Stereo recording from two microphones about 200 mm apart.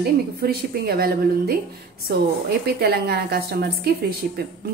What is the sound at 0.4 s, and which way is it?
Speech, 50° right (ahead or behind).